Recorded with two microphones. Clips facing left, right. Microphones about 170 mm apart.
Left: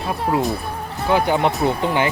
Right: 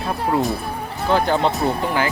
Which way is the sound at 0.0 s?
Centre (ahead or behind).